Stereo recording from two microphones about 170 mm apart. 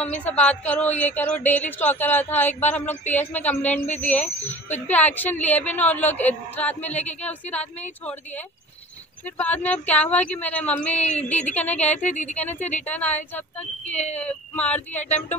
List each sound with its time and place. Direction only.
0.0 s speech: 10° left (ahead or behind)
3.8 s speech: 40° left (ahead or behind)
4.1 s speech: 10° left (ahead or behind)
9.4 s speech: 10° left (ahead or behind)